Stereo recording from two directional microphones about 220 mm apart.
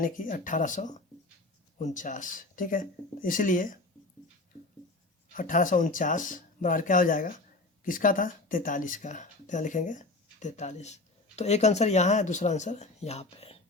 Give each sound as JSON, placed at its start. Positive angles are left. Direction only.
{"t": 0.0, "sound": "speech", "side_deg": 40}
{"t": 5.3, "sound": "speech", "side_deg": 35}